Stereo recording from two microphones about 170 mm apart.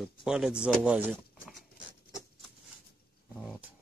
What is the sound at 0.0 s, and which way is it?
Speech, 5° right (ahead or behind).